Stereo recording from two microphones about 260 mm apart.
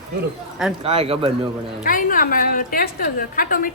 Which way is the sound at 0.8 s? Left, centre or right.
Right.